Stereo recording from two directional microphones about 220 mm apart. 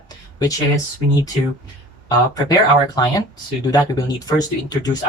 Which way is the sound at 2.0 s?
15° left (ahead or behind).